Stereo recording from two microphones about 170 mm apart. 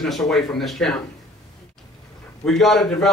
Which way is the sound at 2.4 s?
Centre (ahead or behind).